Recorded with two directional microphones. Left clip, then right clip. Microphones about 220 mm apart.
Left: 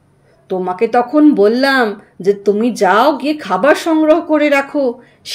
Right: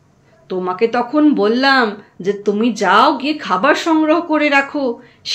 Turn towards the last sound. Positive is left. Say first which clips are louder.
# left 2 dB
turn(degrees=35)  # may be behind; listen again after turning